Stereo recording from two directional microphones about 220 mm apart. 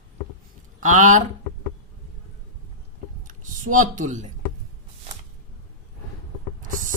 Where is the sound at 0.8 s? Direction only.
35° right (ahead or behind).